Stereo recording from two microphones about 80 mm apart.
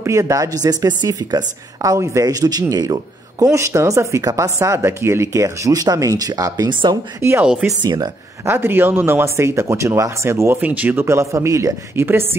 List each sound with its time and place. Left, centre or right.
0.0 s a woman's voice: right
3.5 s speech: right
6.7 s speech: right
7.2 s speech: right
7.4 s speech: centre
7.8 s speech: right
8.5 s speech: right
10.6 s speech: right
11.1 s speech: right